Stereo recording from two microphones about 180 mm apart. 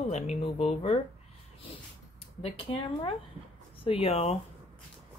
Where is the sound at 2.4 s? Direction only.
30° left (ahead or behind).